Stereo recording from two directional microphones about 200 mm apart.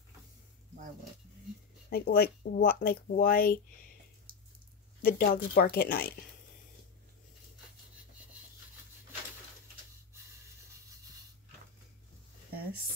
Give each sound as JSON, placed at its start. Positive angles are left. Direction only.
{"t": 1.9, "sound": "speech", "side_deg": 50}
{"t": 4.3, "sound": "a sound", "side_deg": -45}
{"t": 5.0, "sound": "speech", "side_deg": 45}